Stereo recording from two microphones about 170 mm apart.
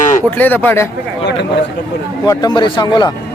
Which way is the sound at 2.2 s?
20° left (ahead or behind).